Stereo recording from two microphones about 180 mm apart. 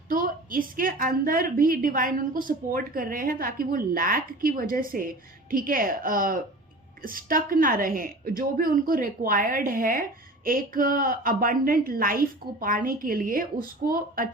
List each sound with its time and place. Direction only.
0.1 s a woman's voice: 50° right (ahead or behind)